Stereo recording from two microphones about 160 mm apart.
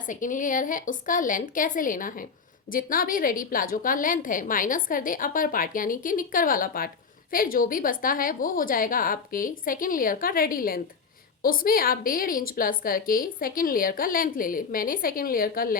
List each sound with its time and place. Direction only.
0.0 s a woman's voice: 55° left (ahead or behind)